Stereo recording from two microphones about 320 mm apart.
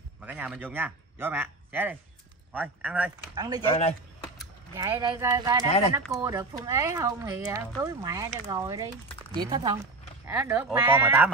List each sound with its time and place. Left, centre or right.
0.2 s speech: centre
3.7 s speech: centre
4.7 s speech: centre
5.7 s speech: centre
6.1 s speech: centre